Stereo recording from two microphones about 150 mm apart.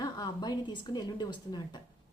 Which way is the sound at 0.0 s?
25° left (ahead or behind).